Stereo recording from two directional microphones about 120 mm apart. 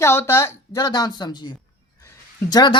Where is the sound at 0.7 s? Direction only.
35° left (ahead or behind).